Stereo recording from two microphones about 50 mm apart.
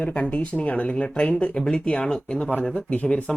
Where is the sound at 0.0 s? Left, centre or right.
Left.